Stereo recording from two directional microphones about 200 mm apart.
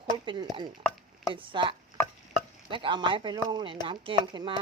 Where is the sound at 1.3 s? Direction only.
25° right (ahead or behind).